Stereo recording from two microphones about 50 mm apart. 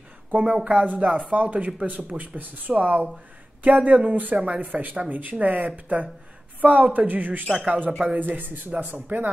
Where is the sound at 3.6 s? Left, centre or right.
Right.